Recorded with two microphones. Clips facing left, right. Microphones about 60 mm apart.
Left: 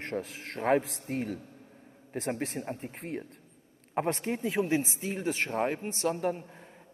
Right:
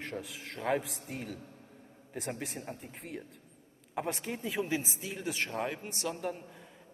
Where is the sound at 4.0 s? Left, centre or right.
Left.